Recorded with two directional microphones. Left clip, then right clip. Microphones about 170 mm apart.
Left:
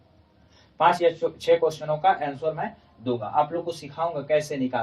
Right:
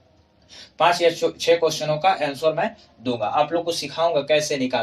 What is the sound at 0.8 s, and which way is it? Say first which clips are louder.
Speech: right 2 dB; 25° right (ahead or behind).